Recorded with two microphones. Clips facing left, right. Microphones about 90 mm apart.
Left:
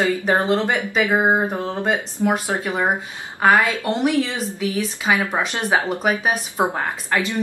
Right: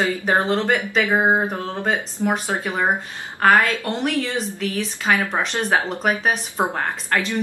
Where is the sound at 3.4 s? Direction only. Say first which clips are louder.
Even; 5° left (ahead or behind).